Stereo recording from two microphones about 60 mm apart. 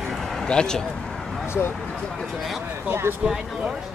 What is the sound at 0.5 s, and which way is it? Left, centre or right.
Speech, centre.